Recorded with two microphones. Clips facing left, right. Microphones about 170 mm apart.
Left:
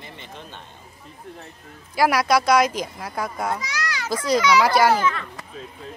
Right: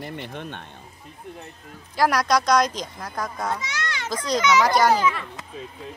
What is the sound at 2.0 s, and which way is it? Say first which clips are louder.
Speech: left 2 dB; 10° left (ahead or behind).